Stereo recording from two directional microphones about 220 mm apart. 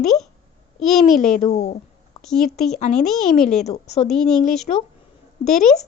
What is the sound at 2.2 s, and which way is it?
Speech, centre (ahead or behind).